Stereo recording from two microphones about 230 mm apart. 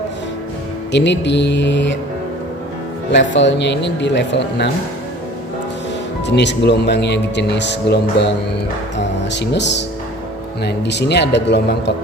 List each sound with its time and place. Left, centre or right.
0.9 s speech: left
3.1 s speech: left
6.2 s speech: left
9.3 s speech: left